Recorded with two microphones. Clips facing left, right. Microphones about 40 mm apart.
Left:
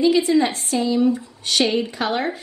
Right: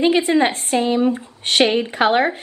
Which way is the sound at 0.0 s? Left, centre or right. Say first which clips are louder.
Right 1 dB; right.